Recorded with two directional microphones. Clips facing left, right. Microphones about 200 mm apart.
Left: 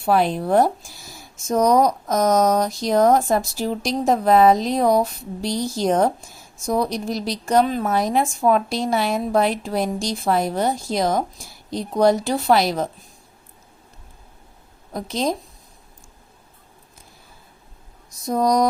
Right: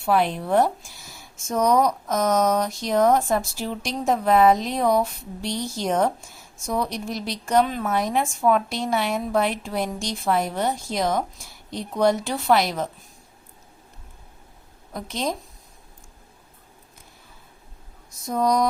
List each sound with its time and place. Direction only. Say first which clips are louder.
0.0 s speech: left 3 dB; 35° left (ahead or behind)
14.9 s speech: left 4 dB; 35° left (ahead or behind)
18.3 s speech: left 3 dB; 40° left (ahead or behind)